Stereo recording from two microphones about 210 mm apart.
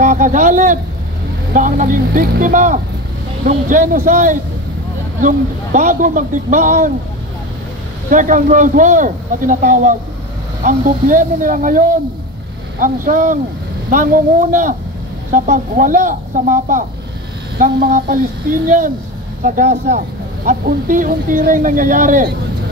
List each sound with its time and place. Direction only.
0.0 s speech: 35° right (ahead or behind)
8.1 s speech: 40° right (ahead or behind)